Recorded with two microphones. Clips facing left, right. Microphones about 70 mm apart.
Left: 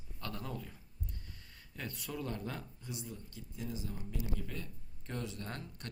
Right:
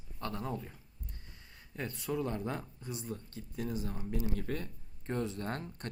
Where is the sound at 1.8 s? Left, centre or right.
Right.